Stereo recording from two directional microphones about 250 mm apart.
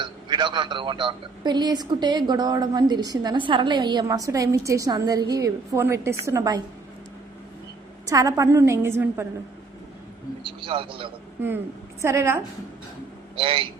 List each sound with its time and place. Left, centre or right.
0.0 s a man's voice: centre
8.0 s a man's voice: centre
10.6 s a man's voice: right
11.3 s a man's voice: centre
13.3 s a man's voice: right